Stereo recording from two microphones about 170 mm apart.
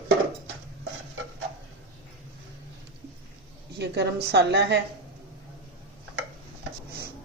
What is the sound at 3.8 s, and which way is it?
A woman's voice, 75° right (ahead or behind).